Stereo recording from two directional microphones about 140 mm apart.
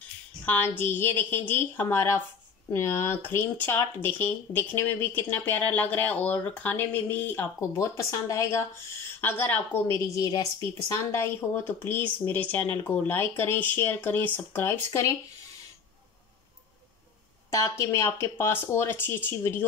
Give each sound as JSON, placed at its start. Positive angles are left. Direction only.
{"t": 0.5, "sound": "speech", "side_deg": 15}
{"t": 17.5, "sound": "speech", "side_deg": 25}